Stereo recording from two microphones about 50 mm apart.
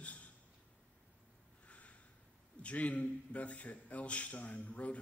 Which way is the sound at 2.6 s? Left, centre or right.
Left.